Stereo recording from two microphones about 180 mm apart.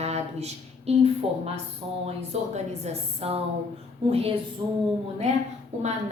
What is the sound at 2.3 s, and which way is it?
A woman's voice, 40° right (ahead or behind).